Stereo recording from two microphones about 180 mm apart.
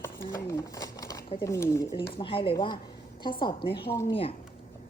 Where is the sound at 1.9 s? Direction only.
30° left (ahead or behind).